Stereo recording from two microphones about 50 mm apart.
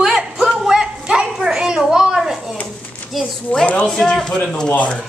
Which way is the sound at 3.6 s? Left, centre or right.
Left.